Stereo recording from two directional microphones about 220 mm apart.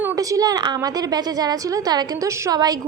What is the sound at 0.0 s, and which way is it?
A woman's voice, 10° right (ahead or behind).